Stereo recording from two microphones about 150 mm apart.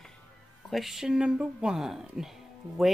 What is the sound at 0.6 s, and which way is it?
Speech, centre (ahead or behind).